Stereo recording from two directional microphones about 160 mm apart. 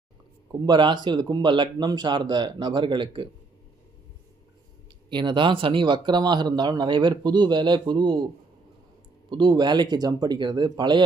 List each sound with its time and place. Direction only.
0.6 s speech: 30° right (ahead or behind)
5.0 s speech: 30° right (ahead or behind)
9.3 s speech: 25° right (ahead or behind)